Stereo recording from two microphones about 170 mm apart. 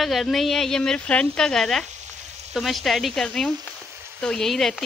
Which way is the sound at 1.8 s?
45° right (ahead or behind).